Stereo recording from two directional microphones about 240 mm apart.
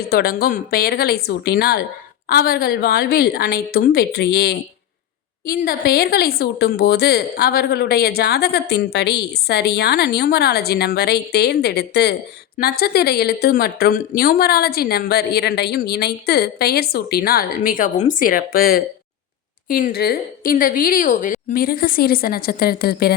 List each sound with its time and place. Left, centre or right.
0.1 s a woman's voice: left